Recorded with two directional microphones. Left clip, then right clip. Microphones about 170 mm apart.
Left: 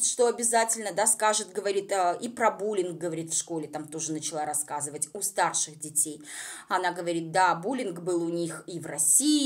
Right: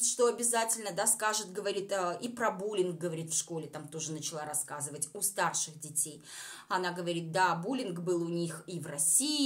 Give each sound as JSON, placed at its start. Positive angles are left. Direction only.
{"t": 0.0, "sound": "speech", "side_deg": 20}